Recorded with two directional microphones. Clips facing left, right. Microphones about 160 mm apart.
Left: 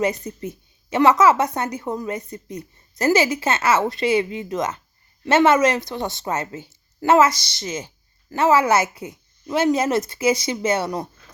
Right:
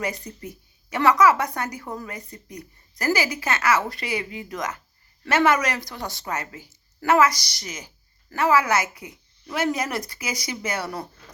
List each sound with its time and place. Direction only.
0.0 s a woman's voice: 20° left (ahead or behind)